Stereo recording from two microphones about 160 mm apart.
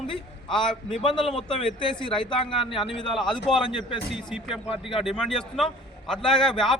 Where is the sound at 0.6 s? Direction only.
30° left (ahead or behind).